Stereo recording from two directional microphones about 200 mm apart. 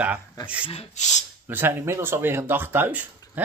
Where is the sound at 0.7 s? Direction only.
35° left (ahead or behind).